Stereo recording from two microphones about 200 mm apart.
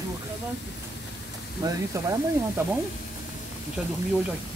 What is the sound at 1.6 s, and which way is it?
Speech, 15° right (ahead or behind).